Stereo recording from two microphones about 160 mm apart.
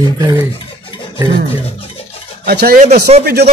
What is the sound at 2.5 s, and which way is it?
Speech, 75° right (ahead or behind).